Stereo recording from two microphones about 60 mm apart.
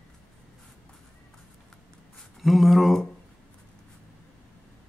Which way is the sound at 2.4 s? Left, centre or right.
Centre.